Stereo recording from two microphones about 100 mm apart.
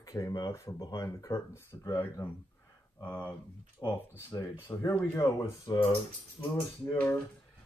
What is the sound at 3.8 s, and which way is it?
Speech, 45° left (ahead or behind).